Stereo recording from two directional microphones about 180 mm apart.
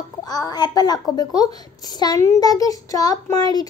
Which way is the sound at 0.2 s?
20° left (ahead or behind).